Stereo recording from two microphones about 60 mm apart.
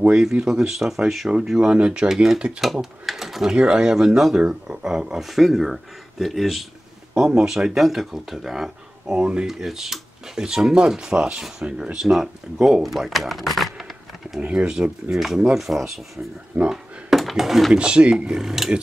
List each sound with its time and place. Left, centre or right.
0.1 s speech: centre
2.6 s speech: centre
7.2 s speech: centre
14.4 s speech: centre
17.7 s speech: centre